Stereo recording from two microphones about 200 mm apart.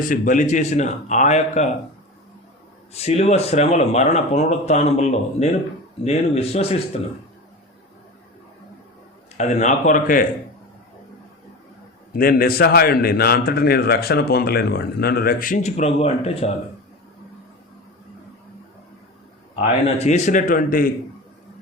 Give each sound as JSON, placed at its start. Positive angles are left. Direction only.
{"t": 0.0, "sound": "speech", "side_deg": 40}
{"t": 2.9, "sound": "speech", "side_deg": 30}
{"t": 9.4, "sound": "speech", "side_deg": 35}
{"t": 12.1, "sound": "a man's voice", "side_deg": 45}
{"t": 19.5, "sound": "speech", "side_deg": 35}